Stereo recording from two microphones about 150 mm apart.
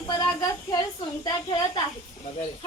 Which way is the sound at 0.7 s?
30° left (ahead or behind).